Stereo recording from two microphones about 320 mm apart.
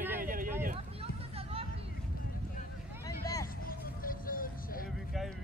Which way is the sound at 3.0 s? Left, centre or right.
Centre.